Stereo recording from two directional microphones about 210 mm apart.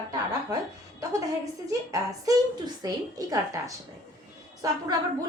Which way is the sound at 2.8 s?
15° right (ahead or behind).